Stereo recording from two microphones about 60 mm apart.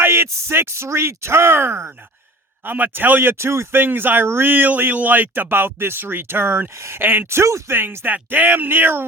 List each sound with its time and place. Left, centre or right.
0.0 s a sound: right
0.3 s speech: right
2.6 s speech: right
7.0 s speech: right
7.3 s speech: right
7.7 s speech: right